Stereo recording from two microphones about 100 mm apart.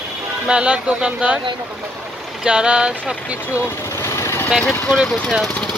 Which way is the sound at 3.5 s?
30° left (ahead or behind).